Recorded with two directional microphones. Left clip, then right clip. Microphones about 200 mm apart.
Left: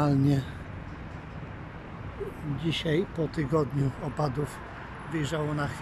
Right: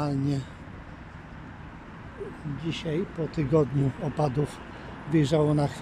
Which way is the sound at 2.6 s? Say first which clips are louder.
Left 3 dB; centre (ahead or behind).